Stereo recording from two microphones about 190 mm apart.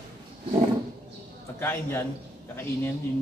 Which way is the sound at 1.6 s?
10° left (ahead or behind).